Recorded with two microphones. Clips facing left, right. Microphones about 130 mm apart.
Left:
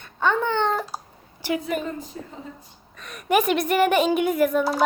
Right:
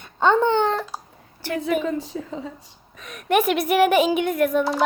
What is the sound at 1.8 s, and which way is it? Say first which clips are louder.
Speech: right 6 dB; 90° right.